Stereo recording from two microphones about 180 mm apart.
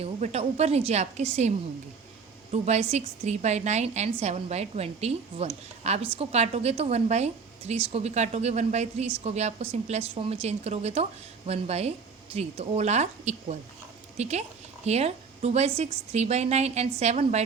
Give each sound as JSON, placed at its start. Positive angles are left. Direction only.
{"t": 0.0, "sound": "a woman's voice", "side_deg": -35}